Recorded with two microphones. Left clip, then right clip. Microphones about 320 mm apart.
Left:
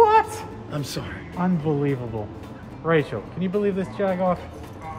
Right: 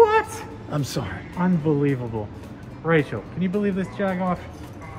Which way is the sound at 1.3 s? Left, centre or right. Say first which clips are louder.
Right 2 dB; centre.